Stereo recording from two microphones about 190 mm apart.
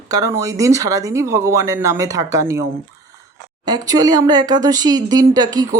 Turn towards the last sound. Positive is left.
turn(degrees=-20)  # may be behind; listen again after turning